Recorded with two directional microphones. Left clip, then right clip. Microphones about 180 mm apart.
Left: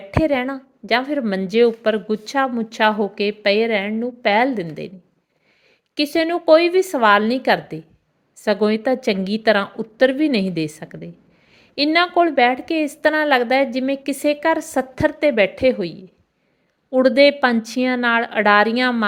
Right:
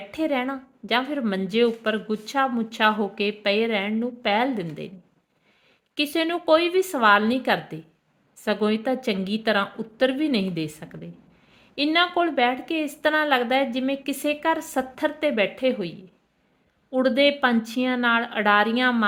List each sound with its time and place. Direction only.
0.1 s a woman's voice: 20° left (ahead or behind)
5.9 s a woman's voice: 25° left (ahead or behind)